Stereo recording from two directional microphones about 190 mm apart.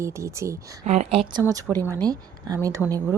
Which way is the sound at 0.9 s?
30° right (ahead or behind).